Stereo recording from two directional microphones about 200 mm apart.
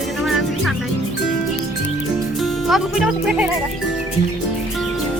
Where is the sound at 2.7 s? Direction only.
Centre (ahead or behind).